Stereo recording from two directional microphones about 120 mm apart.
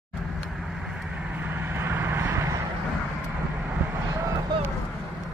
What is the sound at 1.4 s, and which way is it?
Vehicle, 15° right (ahead or behind).